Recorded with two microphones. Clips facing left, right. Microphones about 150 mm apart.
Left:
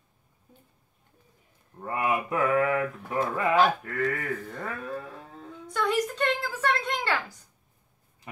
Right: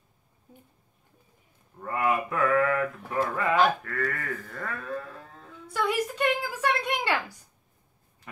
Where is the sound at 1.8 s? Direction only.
20° left (ahead or behind).